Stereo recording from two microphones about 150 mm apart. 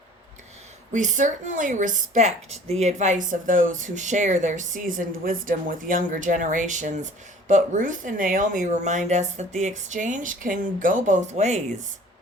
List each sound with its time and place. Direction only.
0.9 s a woman's voice: 55° right (ahead or behind)